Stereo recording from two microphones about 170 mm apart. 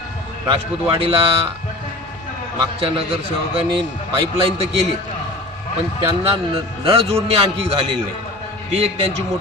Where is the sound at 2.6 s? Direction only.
35° right (ahead or behind).